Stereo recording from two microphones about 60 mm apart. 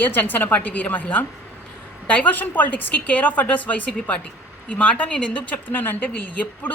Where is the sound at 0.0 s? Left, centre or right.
Left.